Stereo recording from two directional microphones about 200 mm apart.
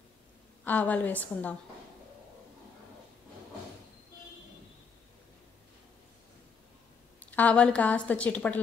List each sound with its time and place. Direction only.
0.7 s a woman's voice: 10° left (ahead or behind)
7.2 s a woman's voice: 10° left (ahead or behind)